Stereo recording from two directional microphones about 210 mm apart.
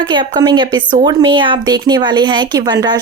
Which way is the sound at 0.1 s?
20° right (ahead or behind).